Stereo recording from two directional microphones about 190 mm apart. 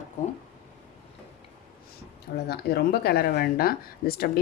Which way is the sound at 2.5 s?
55° left (ahead or behind).